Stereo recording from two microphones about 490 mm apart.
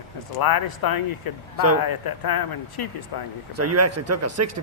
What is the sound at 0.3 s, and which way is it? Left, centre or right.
Speech, left.